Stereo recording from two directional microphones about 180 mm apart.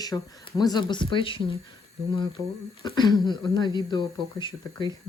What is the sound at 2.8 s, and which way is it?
Speech, 25° left (ahead or behind).